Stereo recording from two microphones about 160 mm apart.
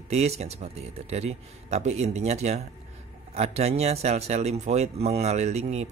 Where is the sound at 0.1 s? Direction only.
40° right (ahead or behind).